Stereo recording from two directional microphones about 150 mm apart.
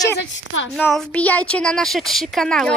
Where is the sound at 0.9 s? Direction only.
5° left (ahead or behind).